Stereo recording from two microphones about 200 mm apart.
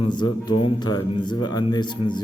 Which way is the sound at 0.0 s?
20° left (ahead or behind).